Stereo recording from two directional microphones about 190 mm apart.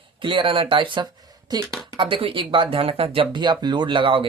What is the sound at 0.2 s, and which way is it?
Speech, 25° right (ahead or behind).